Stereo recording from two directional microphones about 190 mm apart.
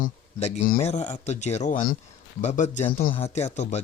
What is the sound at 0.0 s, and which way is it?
Speech, 35° left (ahead or behind).